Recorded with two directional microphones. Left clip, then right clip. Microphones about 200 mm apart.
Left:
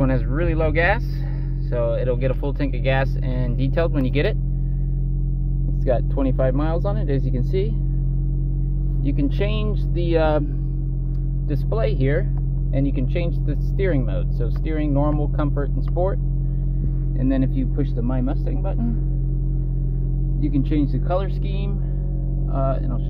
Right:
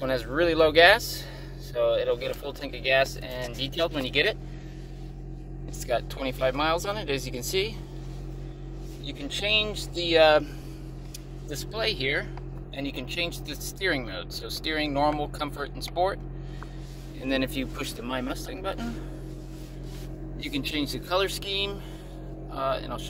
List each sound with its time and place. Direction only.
0.3 s speech: 35° right (ahead or behind); by 4.4 s 5° right (ahead or behind)
5.9 s speech: 5° right (ahead or behind)
9.0 s speech: 5° left (ahead or behind)
11.5 s speech: 10° left (ahead or behind)
17.3 s speech: 20° right (ahead or behind)
20.4 s speech: 15° right (ahead or behind)